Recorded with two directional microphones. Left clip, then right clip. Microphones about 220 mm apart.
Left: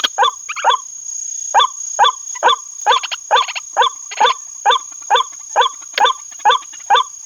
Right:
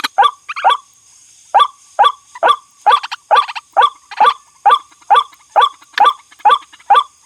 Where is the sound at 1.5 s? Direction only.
20° right (ahead or behind).